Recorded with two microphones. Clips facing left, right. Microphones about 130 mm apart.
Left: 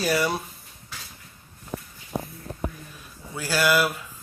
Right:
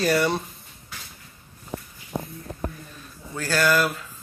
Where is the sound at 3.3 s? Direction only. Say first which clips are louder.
Right 1 dB; 10° left (ahead or behind).